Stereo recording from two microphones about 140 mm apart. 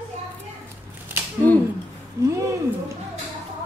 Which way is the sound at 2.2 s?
20° right (ahead or behind).